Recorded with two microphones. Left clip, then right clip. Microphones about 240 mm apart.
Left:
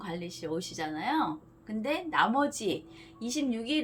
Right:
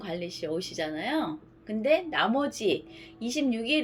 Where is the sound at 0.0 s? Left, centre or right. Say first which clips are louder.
Right 4 dB; left.